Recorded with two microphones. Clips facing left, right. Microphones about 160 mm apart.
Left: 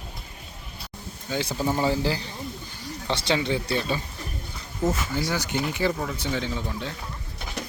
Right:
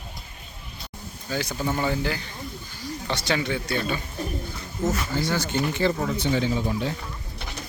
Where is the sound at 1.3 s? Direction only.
25° left (ahead or behind).